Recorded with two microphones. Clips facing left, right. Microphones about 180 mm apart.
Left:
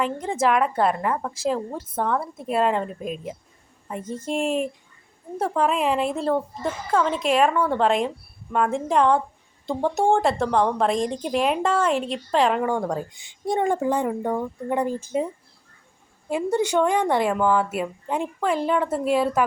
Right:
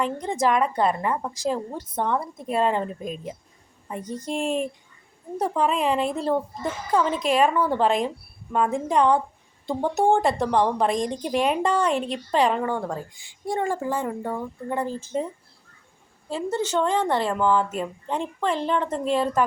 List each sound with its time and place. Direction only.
0.0 s a woman's voice: 5° left (ahead or behind)
12.9 s speech: 20° left (ahead or behind)
16.3 s speech: 15° left (ahead or behind)